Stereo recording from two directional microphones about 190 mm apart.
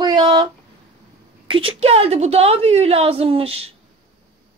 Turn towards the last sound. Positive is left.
turn(degrees=-30)  # may be behind; listen again after turning